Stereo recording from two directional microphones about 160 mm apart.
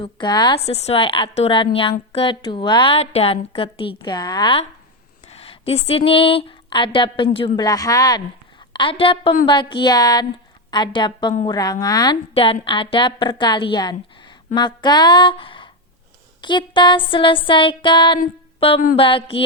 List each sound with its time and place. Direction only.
0.0 s a woman's voice: 30° left (ahead or behind)
0.6 s a woman's voice: 40° left (ahead or behind); by 12.1 s 25° left (ahead or behind)
12.3 s a woman's voice: 35° left (ahead or behind)